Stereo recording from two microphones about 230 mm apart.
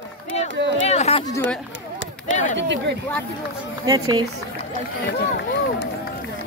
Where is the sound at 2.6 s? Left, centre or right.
Right.